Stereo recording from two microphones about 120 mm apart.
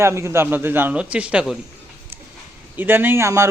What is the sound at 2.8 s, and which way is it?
Speech, 15° right (ahead or behind).